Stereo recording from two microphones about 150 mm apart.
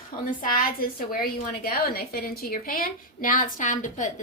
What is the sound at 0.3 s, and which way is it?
A woman's voice, 65° left (ahead or behind).